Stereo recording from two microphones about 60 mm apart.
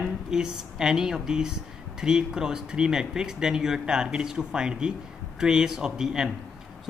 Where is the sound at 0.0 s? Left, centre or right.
Centre.